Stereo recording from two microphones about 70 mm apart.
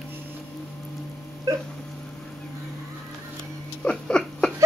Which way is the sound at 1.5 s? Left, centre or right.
Right.